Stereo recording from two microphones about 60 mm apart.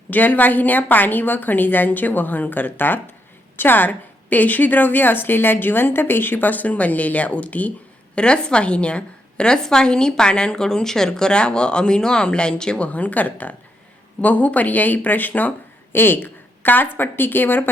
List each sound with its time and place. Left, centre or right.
0.1 s a woman's voice: left